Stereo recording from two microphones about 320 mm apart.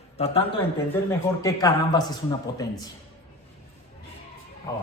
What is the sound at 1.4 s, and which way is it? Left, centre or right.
Speech, centre.